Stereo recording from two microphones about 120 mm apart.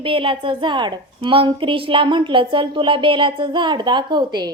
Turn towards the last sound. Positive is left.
turn(degrees=-40)  # may be behind; listen again after turning